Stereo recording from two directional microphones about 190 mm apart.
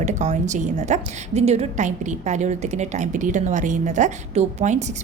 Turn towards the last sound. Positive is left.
turn(degrees=-40)  # may be behind; listen again after turning